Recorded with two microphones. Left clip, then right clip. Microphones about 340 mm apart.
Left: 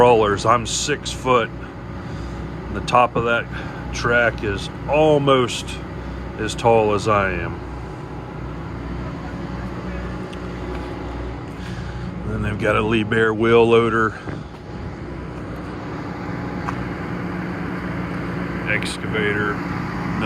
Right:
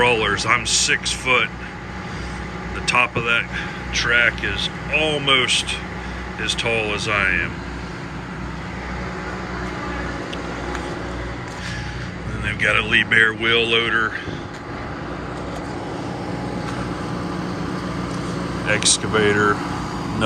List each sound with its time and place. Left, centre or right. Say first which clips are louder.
0.0 s speech: left 4 dB; centre
2.8 s speech: left 2 dB; centre
12.5 s speech: right 2 dB; centre
17.2 s vehicle: right 1 dB; right
18.6 s speech: right 5 dB; centre